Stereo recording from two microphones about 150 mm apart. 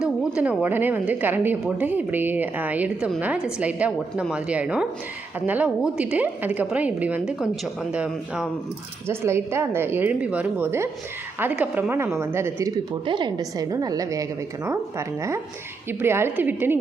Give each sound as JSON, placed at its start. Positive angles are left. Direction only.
{"t": 0.0, "sound": "a sound", "side_deg": -5}
{"t": 0.6, "sound": "a woman's voice", "side_deg": -15}
{"t": 9.0, "sound": "a woman's voice", "side_deg": -15}
{"t": 13.1, "sound": "a woman's voice", "side_deg": -30}